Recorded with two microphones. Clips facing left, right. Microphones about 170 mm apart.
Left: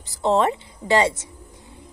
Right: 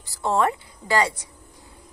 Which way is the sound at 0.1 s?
20° left (ahead or behind).